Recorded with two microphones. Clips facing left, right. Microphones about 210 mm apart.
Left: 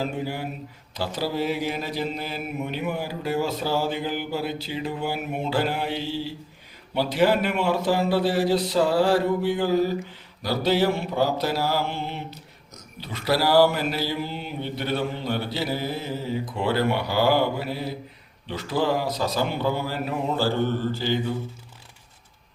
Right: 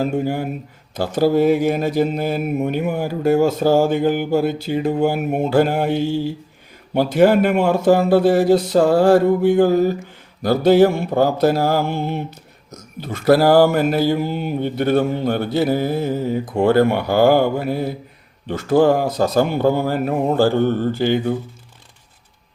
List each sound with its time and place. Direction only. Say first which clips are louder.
0.0 s speech: right 8 dB; 50° right (ahead or behind)